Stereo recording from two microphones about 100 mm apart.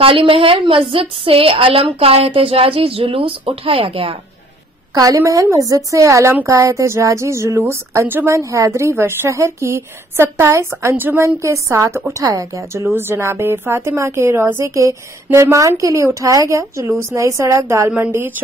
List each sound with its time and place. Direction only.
0.0 s a woman's voice: 65° right (ahead or behind)
4.9 s a woman's voice: 35° right (ahead or behind); by 18.3 s 20° right (ahead or behind)